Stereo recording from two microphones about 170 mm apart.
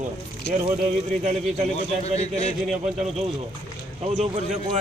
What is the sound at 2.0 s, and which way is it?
Speech, 40° left (ahead or behind).